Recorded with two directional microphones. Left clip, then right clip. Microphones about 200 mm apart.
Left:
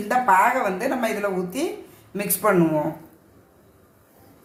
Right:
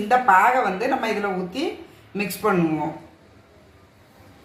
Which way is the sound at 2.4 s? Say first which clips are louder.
Left 2 dB; 40° left (ahead or behind).